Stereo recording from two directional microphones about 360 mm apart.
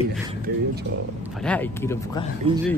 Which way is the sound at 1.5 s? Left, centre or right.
Centre.